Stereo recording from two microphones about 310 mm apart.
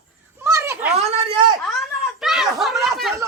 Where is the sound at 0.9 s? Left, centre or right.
Centre.